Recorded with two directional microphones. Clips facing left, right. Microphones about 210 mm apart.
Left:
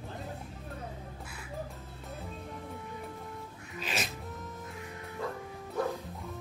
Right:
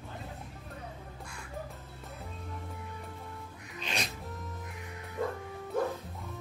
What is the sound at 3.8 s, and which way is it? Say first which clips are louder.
Music: left 1 dB; 5° left (ahead or behind).